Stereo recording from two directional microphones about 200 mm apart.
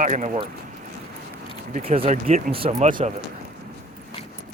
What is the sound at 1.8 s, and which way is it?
Speech, 35° right (ahead or behind).